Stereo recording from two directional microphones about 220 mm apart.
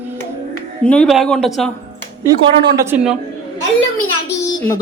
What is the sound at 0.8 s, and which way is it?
Speech, 5° left (ahead or behind).